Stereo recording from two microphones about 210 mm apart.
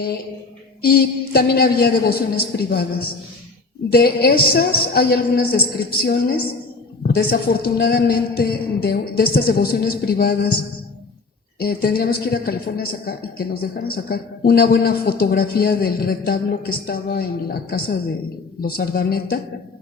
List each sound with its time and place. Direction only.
0.8 s a woman's voice: 45° left (ahead or behind)
11.6 s a woman's voice: 45° left (ahead or behind)